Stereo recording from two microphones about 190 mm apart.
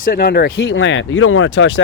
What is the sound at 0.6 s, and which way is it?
Speech, 85° left.